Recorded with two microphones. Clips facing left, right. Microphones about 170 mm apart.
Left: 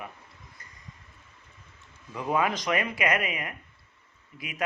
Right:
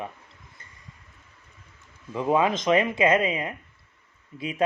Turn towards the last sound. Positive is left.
turn(degrees=-30)  # may be behind; listen again after turning